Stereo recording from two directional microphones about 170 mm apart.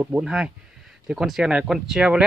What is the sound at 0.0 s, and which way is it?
Speech, 5° right (ahead or behind).